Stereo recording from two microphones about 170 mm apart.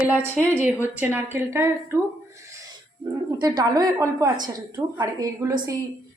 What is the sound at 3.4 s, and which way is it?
A woman's voice, 20° right (ahead or behind).